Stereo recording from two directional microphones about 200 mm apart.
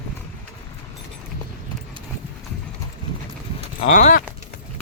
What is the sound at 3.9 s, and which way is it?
Speech, 40° left (ahead or behind).